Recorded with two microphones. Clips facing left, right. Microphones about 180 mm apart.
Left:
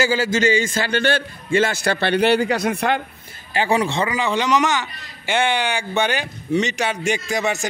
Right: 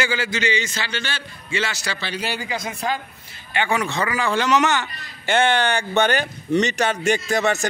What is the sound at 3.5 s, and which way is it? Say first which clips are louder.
A man's voice: left 3 dB; 35° left (ahead or behind).